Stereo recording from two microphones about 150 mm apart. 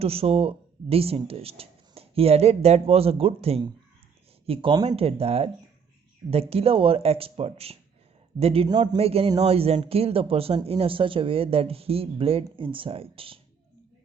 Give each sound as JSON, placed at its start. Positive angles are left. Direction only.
{"t": 0.0, "sound": "speech", "side_deg": -40}
{"t": 6.5, "sound": "speech", "side_deg": -40}
{"t": 9.0, "sound": "speech", "side_deg": -40}